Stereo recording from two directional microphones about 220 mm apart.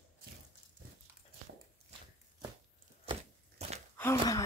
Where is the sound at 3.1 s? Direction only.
30° right (ahead or behind).